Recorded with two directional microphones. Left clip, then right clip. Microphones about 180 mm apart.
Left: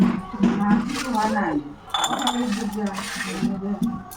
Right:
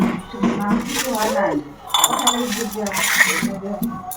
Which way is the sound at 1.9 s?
10° right (ahead or behind).